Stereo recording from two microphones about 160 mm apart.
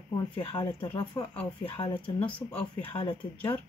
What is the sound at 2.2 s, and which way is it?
Speech, 10° left (ahead or behind).